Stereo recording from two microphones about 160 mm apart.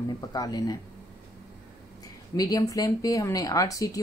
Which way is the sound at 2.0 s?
25° left (ahead or behind).